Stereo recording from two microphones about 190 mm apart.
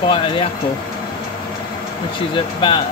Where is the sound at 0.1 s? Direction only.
25° left (ahead or behind).